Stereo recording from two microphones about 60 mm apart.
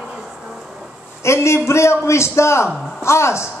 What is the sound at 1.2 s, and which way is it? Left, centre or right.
A man's voice, left.